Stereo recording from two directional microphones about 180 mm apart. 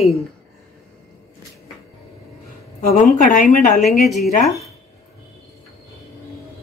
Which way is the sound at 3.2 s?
45° left (ahead or behind).